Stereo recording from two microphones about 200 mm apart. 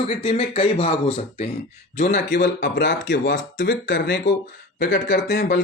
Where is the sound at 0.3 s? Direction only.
30° left (ahead or behind).